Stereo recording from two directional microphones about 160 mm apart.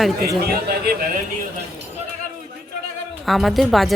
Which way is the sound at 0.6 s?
75° right (ahead or behind).